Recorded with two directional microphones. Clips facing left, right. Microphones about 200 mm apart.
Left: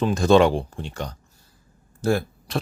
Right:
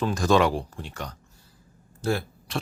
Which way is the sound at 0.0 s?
25° left (ahead or behind).